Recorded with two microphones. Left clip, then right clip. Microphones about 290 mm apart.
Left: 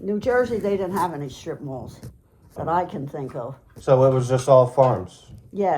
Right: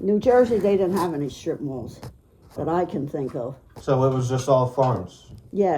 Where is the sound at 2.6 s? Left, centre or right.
Centre.